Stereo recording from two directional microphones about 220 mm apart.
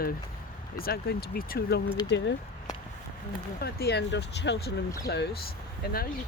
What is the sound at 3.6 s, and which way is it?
Speech, 45° left (ahead or behind).